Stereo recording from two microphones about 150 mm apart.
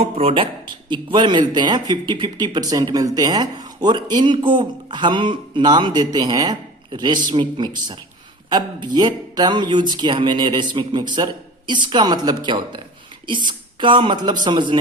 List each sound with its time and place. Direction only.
0.0 s speech: 40° right (ahead or behind)
1.1 s speech: 30° right (ahead or behind)